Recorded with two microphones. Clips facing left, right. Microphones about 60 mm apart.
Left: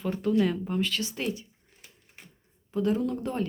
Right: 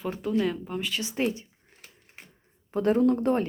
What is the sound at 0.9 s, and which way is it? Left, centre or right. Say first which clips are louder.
Speech: right 2 dB; right.